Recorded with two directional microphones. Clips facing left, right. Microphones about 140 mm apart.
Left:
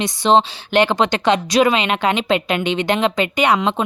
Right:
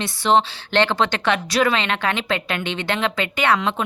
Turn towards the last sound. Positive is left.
turn(degrees=15)  # may be behind; listen again after turning